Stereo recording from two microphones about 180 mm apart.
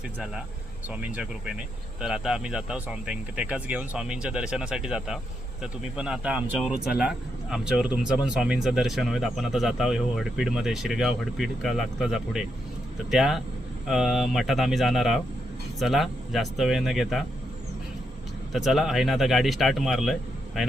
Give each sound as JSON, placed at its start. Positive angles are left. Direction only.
{"t": 0.9, "sound": "speech", "side_deg": -10}
{"t": 18.5, "sound": "speech", "side_deg": 0}